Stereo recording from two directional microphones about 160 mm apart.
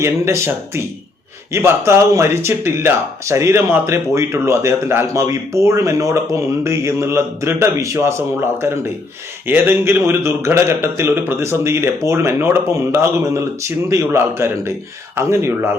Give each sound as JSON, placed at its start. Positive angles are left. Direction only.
{"t": 0.0, "sound": "speech", "side_deg": -15}